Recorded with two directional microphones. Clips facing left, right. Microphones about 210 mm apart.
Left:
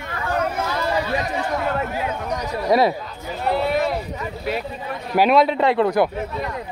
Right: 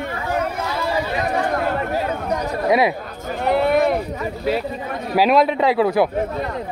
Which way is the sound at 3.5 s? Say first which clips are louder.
Right 4 dB; 55° right (ahead or behind).